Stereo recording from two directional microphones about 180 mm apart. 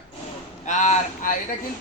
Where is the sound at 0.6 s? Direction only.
45° left (ahead or behind).